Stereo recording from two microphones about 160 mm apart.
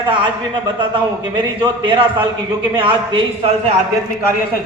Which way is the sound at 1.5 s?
30° right (ahead or behind).